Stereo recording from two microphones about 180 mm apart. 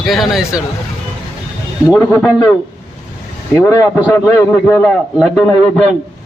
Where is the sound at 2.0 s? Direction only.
10° left (ahead or behind).